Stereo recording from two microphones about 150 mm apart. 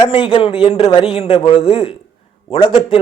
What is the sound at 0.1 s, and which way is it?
Speech, 35° left (ahead or behind).